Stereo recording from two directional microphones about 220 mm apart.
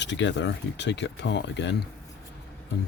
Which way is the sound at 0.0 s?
55° left (ahead or behind).